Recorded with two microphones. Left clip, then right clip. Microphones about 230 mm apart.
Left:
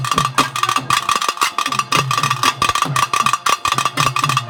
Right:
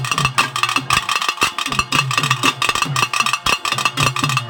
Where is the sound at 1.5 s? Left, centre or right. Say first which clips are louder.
Left 1 dB; left.